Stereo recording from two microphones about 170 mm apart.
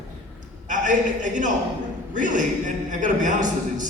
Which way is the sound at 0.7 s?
50° right (ahead or behind).